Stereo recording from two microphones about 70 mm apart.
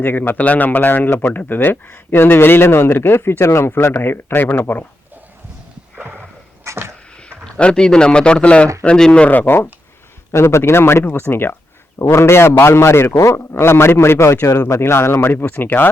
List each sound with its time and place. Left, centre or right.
0.0 s speech: left
6.0 s a sound: right
6.7 s a sound: right
7.3 s speech: centre
9.3 s speech: left
10.3 s speech: left